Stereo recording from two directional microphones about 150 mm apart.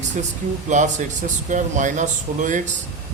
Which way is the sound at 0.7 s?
55° right (ahead or behind).